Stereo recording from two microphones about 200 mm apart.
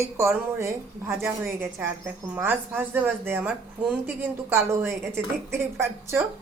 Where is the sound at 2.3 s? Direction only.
10° right (ahead or behind).